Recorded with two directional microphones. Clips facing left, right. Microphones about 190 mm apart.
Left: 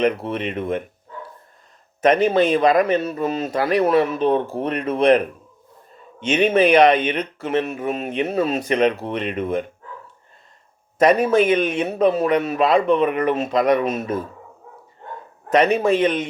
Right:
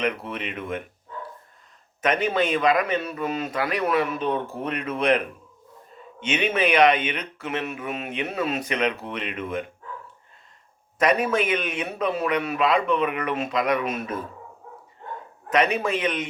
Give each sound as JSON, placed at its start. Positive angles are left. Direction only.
{"t": 0.0, "sound": "speech", "side_deg": 35}
{"t": 2.0, "sound": "speech", "side_deg": 35}
{"t": 11.0, "sound": "speech", "side_deg": 35}
{"t": 15.5, "sound": "speech", "side_deg": 30}